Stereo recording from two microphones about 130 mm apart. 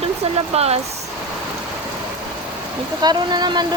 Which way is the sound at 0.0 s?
50° right (ahead or behind).